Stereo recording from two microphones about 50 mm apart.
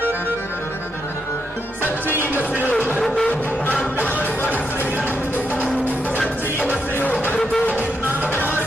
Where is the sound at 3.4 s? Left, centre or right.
Left.